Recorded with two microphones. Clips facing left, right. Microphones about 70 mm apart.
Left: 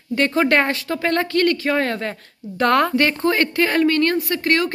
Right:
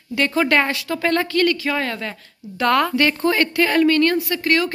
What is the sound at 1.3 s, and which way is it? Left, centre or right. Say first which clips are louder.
A woman's voice: left 1 dB; left.